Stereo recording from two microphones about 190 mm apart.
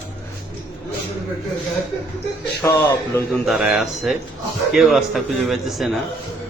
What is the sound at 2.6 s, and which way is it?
Speech, 10° left (ahead or behind).